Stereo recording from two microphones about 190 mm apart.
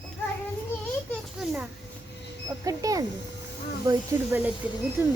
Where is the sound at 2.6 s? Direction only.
20° right (ahead or behind).